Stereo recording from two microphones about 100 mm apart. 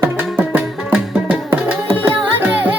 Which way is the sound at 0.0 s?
15° right (ahead or behind).